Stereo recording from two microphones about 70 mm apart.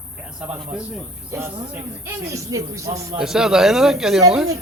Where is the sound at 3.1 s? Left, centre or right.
Centre.